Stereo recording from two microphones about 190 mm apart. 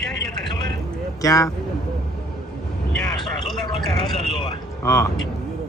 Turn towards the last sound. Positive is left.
turn(degrees=15)  # may be behind; listen again after turning